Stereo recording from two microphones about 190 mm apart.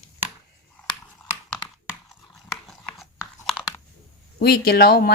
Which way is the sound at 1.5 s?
Centre (ahead or behind).